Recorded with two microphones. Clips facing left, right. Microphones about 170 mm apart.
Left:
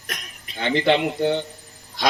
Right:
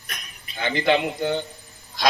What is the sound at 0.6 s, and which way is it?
Speech, 30° left (ahead or behind).